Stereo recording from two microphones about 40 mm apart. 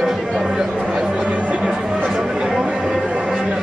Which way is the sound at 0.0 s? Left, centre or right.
Centre.